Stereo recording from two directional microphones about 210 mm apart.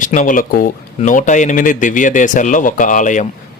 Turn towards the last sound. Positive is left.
turn(degrees=35)  # may be behind; listen again after turning